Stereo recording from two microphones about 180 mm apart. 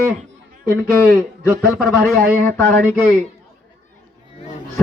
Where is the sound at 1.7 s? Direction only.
Centre (ahead or behind).